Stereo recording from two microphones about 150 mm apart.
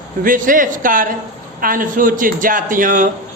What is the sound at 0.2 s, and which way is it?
A man's voice, 65° right (ahead or behind).